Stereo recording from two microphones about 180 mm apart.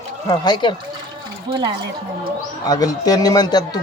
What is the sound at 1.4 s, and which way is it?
Speech, 25° right (ahead or behind).